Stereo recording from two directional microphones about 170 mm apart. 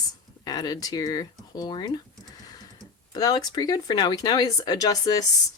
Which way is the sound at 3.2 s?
20° left (ahead or behind).